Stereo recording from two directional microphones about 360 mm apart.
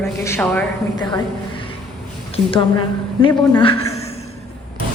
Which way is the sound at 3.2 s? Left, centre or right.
Centre.